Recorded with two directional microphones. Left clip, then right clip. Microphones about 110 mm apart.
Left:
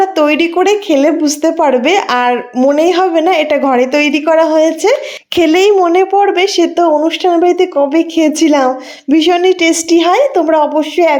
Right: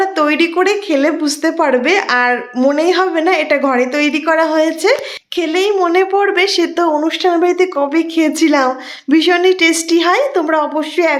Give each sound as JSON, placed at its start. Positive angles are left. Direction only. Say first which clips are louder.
{"t": 0.0, "sound": "a woman's voice", "louder": "left 3 dB", "side_deg": 35}
{"t": 5.4, "sound": "a child's voice", "louder": "left 6 dB", "side_deg": 70}
{"t": 5.8, "sound": "a woman's voice", "louder": "left 3 dB", "side_deg": 30}